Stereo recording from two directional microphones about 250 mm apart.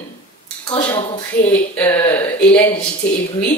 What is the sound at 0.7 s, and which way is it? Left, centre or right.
Speech, centre.